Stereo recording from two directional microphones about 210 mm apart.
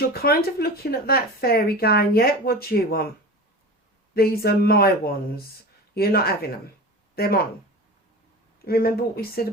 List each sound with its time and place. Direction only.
0.1 s speech: 45° left (ahead or behind)
4.1 s speech: 45° left (ahead or behind)
8.6 s speech: 45° left (ahead or behind)